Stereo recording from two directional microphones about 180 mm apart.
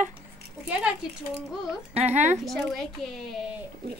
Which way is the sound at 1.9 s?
40° right (ahead or behind).